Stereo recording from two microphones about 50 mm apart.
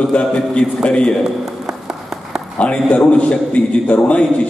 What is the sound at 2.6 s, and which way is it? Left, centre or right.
A man's voice, left.